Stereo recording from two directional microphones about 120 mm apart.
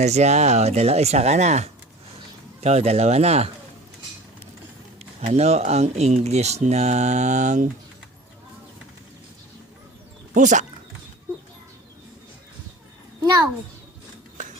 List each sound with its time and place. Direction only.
0.0 s speech: 65° right (ahead or behind)
4.9 s speech: 65° right (ahead or behind)
10.3 s dog: 90° right
14.4 s a sound: 90° right